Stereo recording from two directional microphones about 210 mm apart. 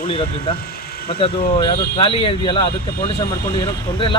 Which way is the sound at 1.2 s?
25° left (ahead or behind).